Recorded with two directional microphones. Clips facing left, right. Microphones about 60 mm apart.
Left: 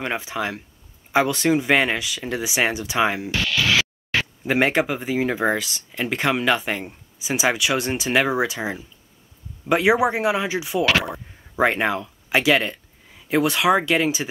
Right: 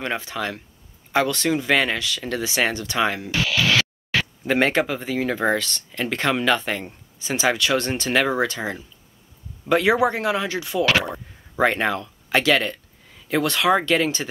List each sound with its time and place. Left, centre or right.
0.0 s speech: centre